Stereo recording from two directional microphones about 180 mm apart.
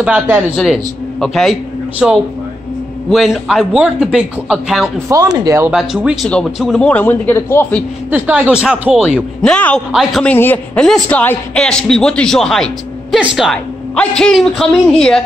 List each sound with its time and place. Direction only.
0.0 s a man's voice: 5° right (ahead or behind)
5.1 s speech: 20° right (ahead or behind)
5.7 s a man's voice: 5° right (ahead or behind); by 7.8 s 15° left (ahead or behind)
8.1 s speech: 5° right (ahead or behind)